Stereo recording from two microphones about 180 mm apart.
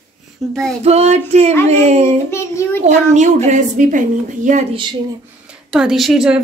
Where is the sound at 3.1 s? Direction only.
40° right (ahead or behind).